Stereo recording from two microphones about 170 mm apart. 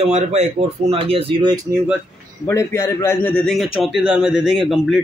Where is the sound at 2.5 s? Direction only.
15° left (ahead or behind).